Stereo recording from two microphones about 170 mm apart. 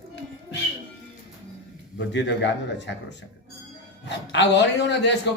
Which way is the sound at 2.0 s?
90° left.